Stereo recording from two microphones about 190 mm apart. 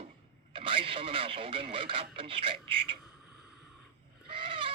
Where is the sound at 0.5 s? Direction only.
30° right (ahead or behind).